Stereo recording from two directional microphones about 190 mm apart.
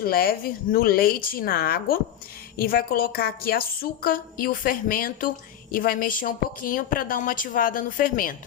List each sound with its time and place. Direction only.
0.0 s a woman's voice: 50° left (ahead or behind)